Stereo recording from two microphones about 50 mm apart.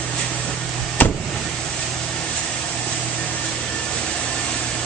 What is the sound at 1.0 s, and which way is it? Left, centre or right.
Vehicle, left.